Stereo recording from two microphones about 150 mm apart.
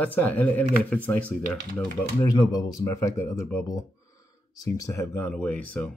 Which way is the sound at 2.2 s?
25° left (ahead or behind).